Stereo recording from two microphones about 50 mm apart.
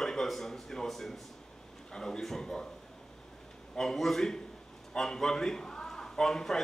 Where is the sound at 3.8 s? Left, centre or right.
Centre.